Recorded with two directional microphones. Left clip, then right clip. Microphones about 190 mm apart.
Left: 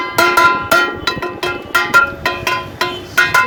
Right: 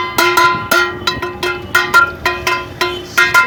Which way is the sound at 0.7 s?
15° right (ahead or behind).